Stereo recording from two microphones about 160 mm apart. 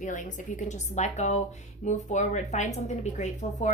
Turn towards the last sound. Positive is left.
turn(degrees=50)  # may be behind; listen again after turning